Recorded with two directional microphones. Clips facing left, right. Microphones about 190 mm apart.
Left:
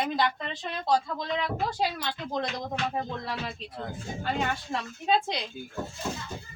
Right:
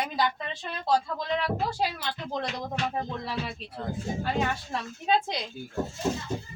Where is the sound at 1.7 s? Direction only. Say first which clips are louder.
Even; 5° right (ahead or behind).